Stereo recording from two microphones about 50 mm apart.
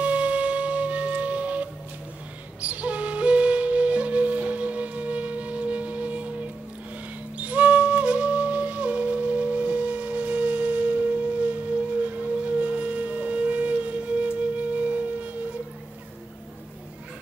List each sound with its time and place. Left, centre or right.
0.0 s music: right
2.6 s flute: right
12.5 s music: right